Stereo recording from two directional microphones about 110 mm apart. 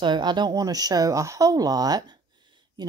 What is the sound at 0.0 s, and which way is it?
Speech, 40° right (ahead or behind).